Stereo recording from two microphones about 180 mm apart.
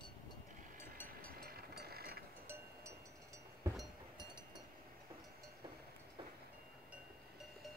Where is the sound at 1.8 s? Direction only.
60° right (ahead or behind).